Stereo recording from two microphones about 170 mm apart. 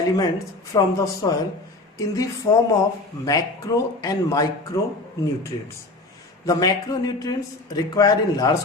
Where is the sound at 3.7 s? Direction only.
20° left (ahead or behind).